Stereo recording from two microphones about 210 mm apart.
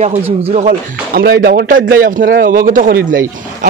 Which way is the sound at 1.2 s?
45° right (ahead or behind).